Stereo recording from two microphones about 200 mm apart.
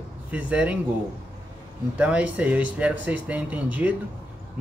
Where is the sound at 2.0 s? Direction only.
5° right (ahead or behind).